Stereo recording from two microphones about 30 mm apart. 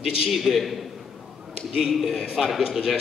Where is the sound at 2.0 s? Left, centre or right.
Centre.